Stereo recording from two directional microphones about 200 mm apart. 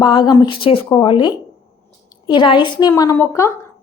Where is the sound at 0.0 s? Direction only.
20° left (ahead or behind).